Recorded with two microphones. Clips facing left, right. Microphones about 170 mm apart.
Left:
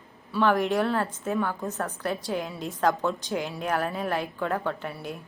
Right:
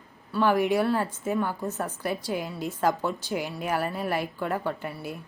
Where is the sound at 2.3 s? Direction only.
Centre (ahead or behind).